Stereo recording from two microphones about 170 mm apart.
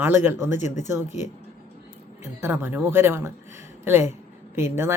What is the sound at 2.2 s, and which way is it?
A man's voice, 15° right (ahead or behind).